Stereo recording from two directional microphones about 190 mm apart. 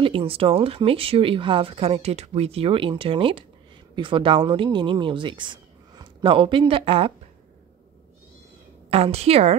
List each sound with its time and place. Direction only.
0.0 s speech: 30° right (ahead or behind)
8.9 s a woman's voice: 30° right (ahead or behind)